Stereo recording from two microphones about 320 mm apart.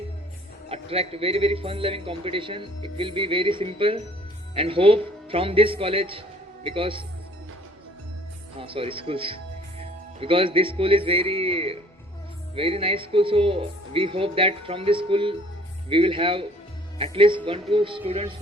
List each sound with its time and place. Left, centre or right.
0.7 s a man's voice: centre
8.5 s speech: centre